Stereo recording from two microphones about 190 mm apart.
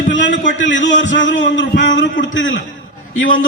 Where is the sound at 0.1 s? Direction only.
75° left (ahead or behind).